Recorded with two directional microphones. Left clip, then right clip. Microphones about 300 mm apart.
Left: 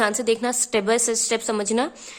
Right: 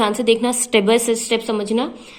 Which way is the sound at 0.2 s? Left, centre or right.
Left.